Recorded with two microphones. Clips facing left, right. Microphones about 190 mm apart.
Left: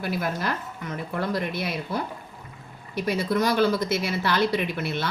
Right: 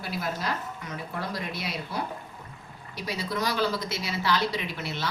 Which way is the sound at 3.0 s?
55° left (ahead or behind).